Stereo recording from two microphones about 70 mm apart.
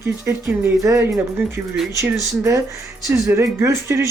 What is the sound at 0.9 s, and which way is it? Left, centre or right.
Speech, right.